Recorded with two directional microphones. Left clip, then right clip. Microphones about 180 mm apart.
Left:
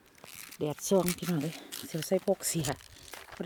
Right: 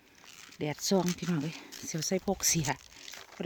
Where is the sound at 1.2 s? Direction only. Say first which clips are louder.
Left 1 dB; 5° right (ahead or behind).